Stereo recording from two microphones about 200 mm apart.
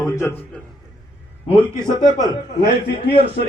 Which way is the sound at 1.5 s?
10° right (ahead or behind).